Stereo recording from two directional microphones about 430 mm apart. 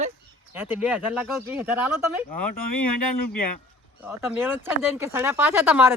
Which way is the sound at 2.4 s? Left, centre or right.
Left.